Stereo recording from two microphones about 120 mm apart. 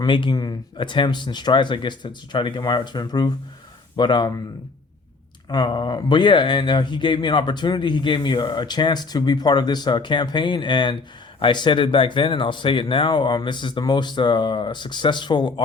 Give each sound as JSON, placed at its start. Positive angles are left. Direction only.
{"t": 0.0, "sound": "speech", "side_deg": 40}
{"t": 5.5, "sound": "speech", "side_deg": 35}